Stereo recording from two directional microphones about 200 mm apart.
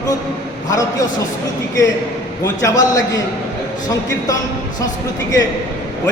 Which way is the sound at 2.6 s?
15° left (ahead or behind).